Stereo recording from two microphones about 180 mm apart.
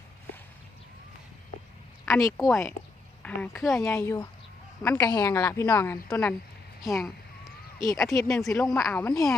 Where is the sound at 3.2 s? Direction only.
5° left (ahead or behind).